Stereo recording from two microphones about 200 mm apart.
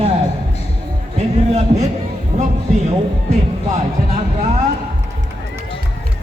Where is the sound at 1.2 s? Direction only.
35° right (ahead or behind).